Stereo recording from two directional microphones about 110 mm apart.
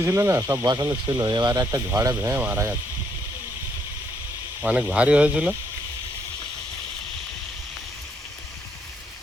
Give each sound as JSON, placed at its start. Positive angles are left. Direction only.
{"t": 0.0, "sound": "speech", "side_deg": -25}
{"t": 0.6, "sound": "speech", "side_deg": -35}
{"t": 1.5, "sound": "speech", "side_deg": -25}
{"t": 4.6, "sound": "speech", "side_deg": -10}